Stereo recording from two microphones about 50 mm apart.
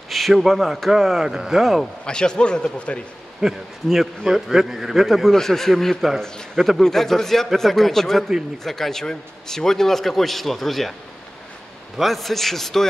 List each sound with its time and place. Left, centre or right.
0.3 s a man's voice: centre
1.2 s speech: centre
2.0 s a man's voice: centre
3.3 s a man's voice: centre
12.0 s a man's voice: centre